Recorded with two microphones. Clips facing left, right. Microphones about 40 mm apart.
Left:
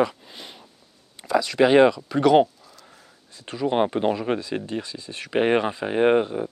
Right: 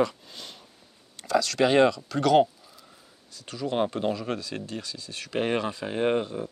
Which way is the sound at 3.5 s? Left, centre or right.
Left.